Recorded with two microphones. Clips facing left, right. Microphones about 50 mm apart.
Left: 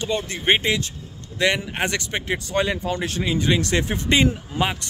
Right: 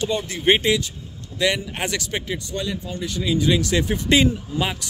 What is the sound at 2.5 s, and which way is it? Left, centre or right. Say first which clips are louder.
Speech: left 8 dB; left.